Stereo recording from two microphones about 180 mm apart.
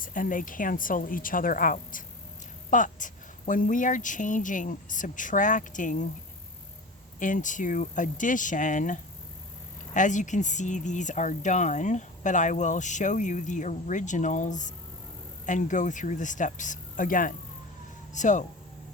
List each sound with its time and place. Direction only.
0.0 s speech: 50° left (ahead or behind)
7.2 s speech: 45° left (ahead or behind)